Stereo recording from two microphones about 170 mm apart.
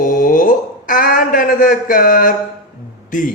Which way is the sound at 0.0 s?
55° left (ahead or behind).